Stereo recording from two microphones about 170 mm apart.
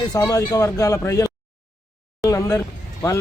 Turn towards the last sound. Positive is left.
turn(degrees=15)  # may be behind; listen again after turning